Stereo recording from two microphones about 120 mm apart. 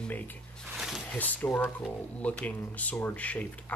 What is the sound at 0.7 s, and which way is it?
Wild animals, centre (ahead or behind).